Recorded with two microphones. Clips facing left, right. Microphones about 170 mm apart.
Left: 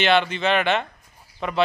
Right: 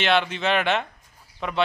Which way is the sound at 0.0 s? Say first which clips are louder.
Left 2 dB; centre (ahead or behind).